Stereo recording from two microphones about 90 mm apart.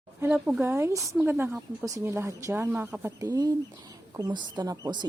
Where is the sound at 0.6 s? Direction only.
30° right (ahead or behind).